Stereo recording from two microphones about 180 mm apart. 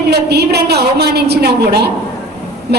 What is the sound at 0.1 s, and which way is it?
A woman's voice, 65° right (ahead or behind).